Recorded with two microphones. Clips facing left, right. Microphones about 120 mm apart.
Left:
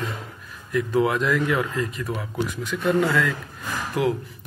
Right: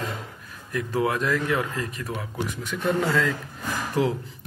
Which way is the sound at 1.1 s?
40° right (ahead or behind).